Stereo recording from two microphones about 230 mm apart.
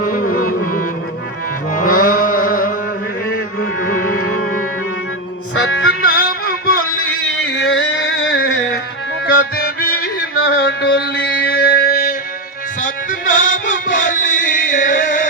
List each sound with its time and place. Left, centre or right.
0.0 s music: left
3.8 s music: left
4.2 s music: left
5.5 s music: left
7.5 s music: left
9.8 s music: left